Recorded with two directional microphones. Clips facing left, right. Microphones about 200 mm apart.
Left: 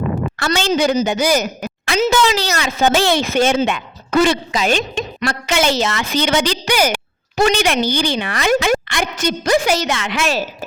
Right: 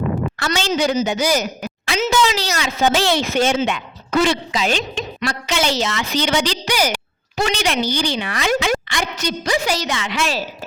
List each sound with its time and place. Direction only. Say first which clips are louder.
0.3 s a woman's voice: left 5 dB; 55° left (ahead or behind)